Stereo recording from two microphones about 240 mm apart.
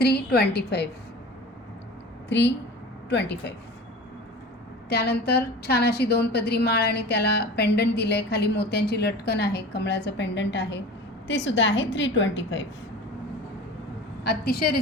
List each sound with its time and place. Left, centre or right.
0.0 s a woman's voice: left
3.1 s a woman's voice: left
4.9 s a woman's voice: left
14.3 s a woman's voice: left